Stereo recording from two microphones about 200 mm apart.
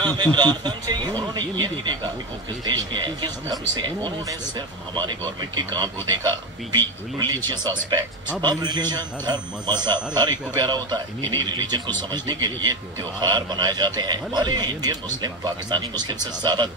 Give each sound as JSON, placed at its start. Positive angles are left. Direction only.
{"t": 0.0, "sound": "speech", "side_deg": -20}